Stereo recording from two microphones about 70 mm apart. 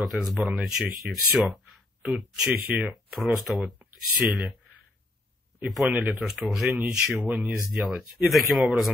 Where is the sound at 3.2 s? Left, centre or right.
Centre.